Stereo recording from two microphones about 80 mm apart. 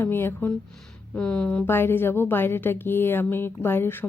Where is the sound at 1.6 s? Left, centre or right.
Left.